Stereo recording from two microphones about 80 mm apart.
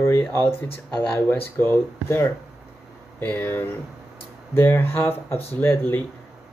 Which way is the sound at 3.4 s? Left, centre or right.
Left.